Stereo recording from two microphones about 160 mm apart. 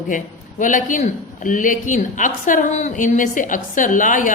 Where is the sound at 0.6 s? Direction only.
55° left (ahead or behind).